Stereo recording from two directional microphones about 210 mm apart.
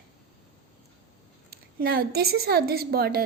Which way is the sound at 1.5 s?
45° right (ahead or behind).